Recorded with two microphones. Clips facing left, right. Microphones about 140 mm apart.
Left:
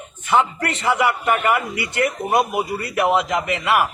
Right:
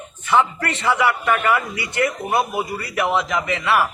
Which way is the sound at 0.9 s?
15° left (ahead or behind).